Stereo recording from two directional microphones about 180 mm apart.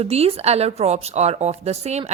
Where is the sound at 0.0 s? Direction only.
35° right (ahead or behind).